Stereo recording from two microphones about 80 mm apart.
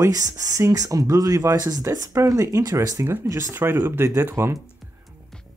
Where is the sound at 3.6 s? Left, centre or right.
Right.